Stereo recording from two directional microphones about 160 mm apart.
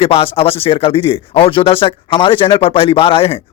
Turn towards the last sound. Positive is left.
turn(degrees=35)  # may be behind; listen again after turning